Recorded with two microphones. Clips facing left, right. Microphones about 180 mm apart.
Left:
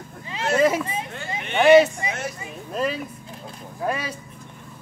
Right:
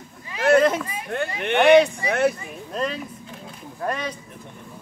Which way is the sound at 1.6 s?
Centre (ahead or behind).